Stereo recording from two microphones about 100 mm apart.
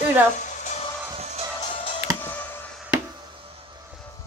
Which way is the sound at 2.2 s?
20° left (ahead or behind).